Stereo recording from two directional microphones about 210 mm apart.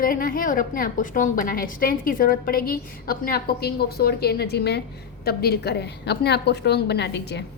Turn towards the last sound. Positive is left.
turn(degrees=55)  # may be behind; listen again after turning